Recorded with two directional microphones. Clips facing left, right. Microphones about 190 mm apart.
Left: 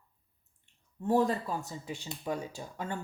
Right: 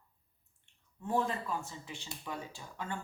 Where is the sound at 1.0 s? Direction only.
40° left (ahead or behind).